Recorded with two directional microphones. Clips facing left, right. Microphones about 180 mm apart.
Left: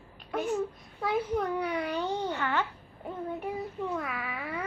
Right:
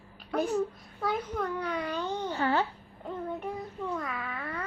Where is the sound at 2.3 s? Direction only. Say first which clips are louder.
Right 3 dB; 35° right (ahead or behind).